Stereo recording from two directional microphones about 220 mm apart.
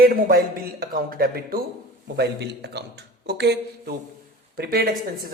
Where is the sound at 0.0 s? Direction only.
40° right (ahead or behind).